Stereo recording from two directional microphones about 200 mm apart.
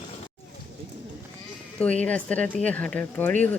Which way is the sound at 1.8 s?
5° left (ahead or behind).